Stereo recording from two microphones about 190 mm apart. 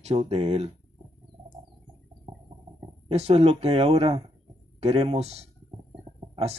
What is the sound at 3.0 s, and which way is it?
Speech, 35° right (ahead or behind).